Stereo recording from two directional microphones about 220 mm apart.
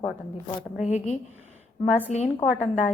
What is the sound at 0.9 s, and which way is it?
A woman's voice, 30° left (ahead or behind).